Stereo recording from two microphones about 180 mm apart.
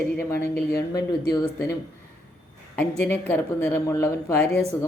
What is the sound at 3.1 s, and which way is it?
Speech, 10° left (ahead or behind).